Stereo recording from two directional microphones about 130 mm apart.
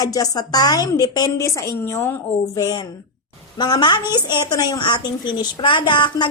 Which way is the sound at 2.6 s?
30° left (ahead or behind).